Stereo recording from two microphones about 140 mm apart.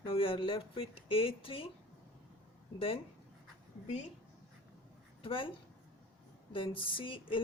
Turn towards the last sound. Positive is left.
turn(degrees=40)  # may be behind; listen again after turning